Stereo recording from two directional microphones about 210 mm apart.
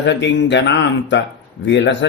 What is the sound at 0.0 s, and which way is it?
Speech, 60° left (ahead or behind).